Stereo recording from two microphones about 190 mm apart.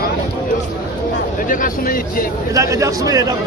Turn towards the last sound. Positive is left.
turn(degrees=-20)  # may be behind; listen again after turning